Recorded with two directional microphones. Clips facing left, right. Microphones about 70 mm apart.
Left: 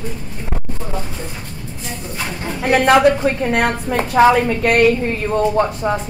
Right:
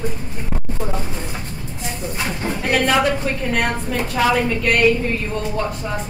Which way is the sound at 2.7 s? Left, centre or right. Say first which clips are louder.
Left 6 dB; left.